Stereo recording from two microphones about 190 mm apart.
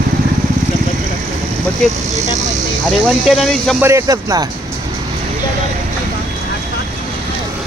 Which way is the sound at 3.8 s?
15° right (ahead or behind).